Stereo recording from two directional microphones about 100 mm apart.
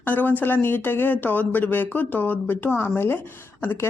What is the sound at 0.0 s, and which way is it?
A woman's voice, 20° left (ahead or behind).